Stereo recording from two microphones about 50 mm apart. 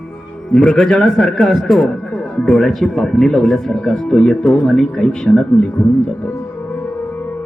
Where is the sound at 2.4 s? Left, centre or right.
Centre.